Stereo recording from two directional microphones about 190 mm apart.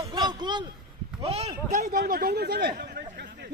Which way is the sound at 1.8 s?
50° right (ahead or behind).